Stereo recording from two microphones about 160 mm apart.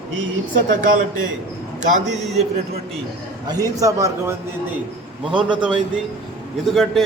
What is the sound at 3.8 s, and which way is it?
Speech, 20° right (ahead or behind).